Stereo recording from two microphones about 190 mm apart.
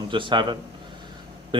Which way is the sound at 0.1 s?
25° right (ahead or behind).